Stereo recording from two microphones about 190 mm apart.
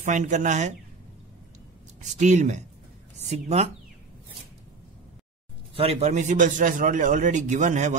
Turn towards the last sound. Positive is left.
turn(degrees=-40)  # may be behind; listen again after turning